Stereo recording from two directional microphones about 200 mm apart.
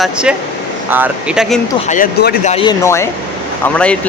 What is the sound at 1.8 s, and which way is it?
Speech, 45° left (ahead or behind).